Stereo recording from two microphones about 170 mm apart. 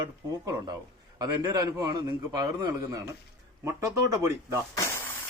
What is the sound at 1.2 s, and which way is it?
A man's voice, 20° right (ahead or behind).